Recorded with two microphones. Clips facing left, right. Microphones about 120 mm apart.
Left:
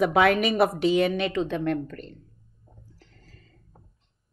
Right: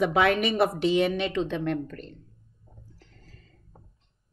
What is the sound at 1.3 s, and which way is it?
Speech, 40° left (ahead or behind).